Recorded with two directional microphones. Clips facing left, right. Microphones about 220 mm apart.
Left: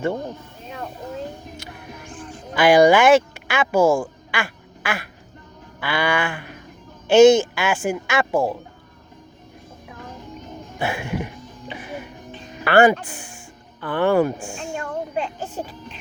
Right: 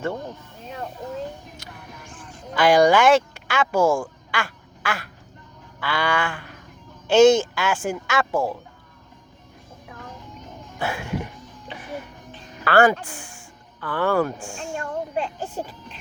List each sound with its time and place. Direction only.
2.6 s speech: 5° left (ahead or behind)
10.8 s music: 10° left (ahead or behind)
12.3 s music: 15° left (ahead or behind)
13.8 s speech: 25° left (ahead or behind)